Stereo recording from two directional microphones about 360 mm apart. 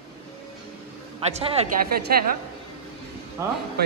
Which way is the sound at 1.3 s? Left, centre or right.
Right.